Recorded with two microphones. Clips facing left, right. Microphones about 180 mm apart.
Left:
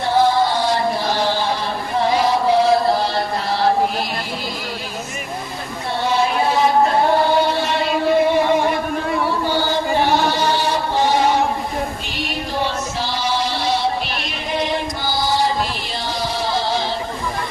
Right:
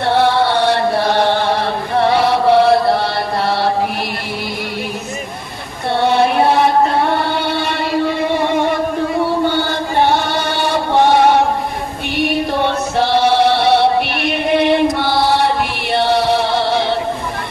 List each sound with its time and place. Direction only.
0.1 s chant: 70° right (ahead or behind)
5.9 s chant: 60° right (ahead or behind)
9.4 s chant: 60° right (ahead or behind)
12.2 s music: 60° right (ahead or behind)